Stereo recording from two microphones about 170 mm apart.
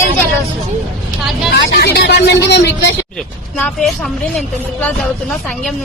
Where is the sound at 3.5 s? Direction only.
10° left (ahead or behind).